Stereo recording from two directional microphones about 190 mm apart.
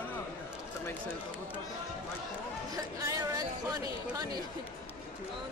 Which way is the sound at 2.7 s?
20° right (ahead or behind).